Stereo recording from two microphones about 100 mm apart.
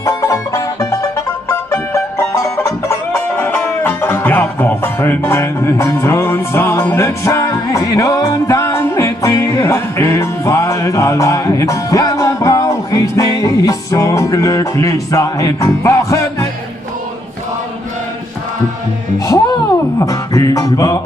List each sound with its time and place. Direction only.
0.0 s music: 35° left (ahead or behind)
19.1 s music: 35° left (ahead or behind)